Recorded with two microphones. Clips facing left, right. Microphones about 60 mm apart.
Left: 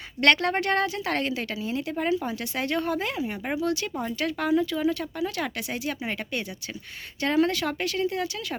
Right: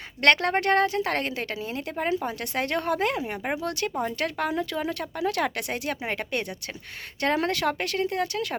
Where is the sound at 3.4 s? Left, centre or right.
Right.